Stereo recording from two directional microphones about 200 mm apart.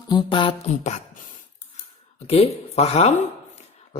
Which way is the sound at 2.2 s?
30° left (ahead or behind).